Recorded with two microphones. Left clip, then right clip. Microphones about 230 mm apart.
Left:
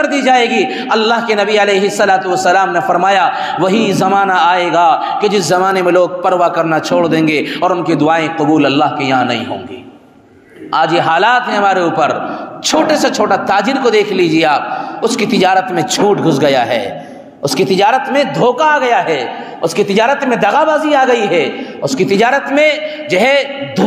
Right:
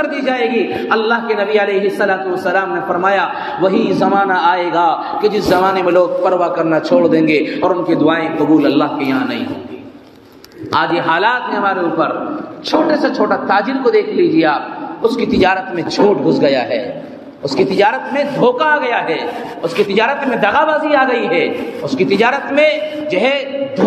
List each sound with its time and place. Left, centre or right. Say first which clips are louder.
0.0 s a man's voice: left 5 dB; left
10.7 s a man's voice: left 3 dB; left